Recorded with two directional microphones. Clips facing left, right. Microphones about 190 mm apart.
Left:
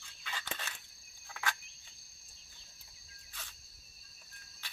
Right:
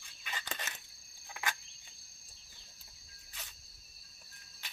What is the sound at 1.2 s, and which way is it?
Cricket, 15° right (ahead or behind).